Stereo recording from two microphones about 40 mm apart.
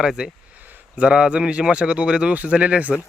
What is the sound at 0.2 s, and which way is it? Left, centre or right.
Speech, right.